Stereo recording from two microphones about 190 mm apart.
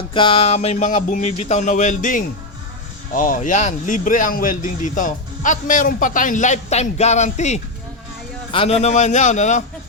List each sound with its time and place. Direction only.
0.1 s speech: 25° left (ahead or behind)